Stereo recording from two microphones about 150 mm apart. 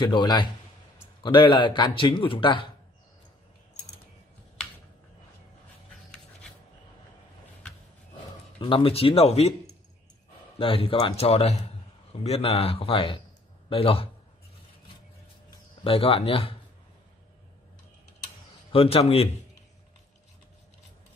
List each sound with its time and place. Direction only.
0.0 s speech: 30° left (ahead or behind)
8.5 s speech: 35° left (ahead or behind)
10.6 s a man's voice: 40° left (ahead or behind)
15.8 s speech: 40° left (ahead or behind)
18.7 s speech: 40° left (ahead or behind)